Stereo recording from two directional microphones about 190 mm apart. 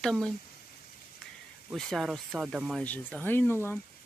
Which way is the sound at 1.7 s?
Centre (ahead or behind).